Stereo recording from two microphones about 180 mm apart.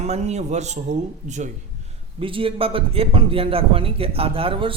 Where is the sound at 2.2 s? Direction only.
30° right (ahead or behind).